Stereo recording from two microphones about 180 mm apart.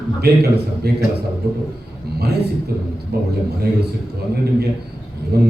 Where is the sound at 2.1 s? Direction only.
65° right (ahead or behind).